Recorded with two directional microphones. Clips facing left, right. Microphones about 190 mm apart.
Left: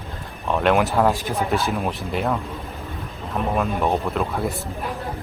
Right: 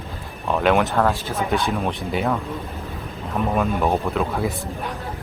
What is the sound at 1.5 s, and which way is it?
Speech, centre (ahead or behind).